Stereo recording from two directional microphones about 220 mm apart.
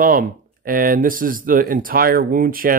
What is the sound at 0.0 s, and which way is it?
Speech, 40° right (ahead or behind).